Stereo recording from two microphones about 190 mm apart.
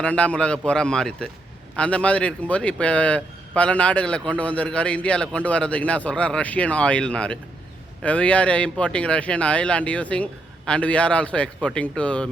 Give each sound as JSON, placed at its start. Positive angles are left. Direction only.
{"t": 0.0, "sound": "a man's voice", "side_deg": 5}